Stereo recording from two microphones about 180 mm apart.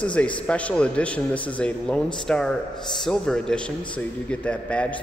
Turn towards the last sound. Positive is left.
turn(degrees=5)  # may be behind; listen again after turning